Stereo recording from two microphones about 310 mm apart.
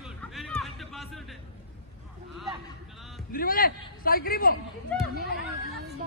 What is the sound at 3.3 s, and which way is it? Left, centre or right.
A man's voice, left.